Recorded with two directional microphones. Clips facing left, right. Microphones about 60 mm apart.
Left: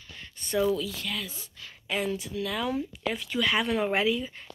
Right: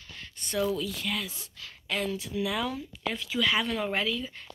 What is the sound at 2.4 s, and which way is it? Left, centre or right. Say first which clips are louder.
Speech: even; centre.